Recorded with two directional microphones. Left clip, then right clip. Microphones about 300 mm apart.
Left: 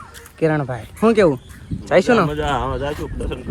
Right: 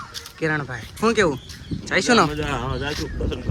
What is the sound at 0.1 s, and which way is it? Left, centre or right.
A man's voice, centre.